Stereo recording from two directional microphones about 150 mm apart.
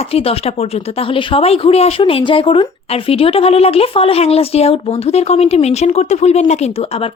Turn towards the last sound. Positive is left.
turn(degrees=45)  # may be behind; listen again after turning